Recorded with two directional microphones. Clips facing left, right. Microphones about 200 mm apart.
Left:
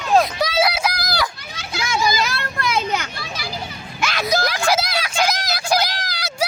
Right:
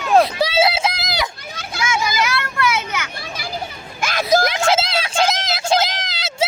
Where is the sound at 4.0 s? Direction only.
50° right (ahead or behind).